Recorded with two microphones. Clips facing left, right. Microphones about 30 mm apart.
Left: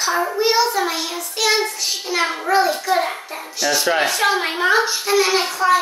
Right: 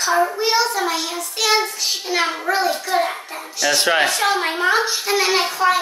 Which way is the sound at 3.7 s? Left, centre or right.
Right.